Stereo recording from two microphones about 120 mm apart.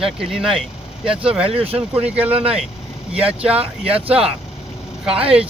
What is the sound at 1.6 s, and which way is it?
Speech, 55° right (ahead or behind).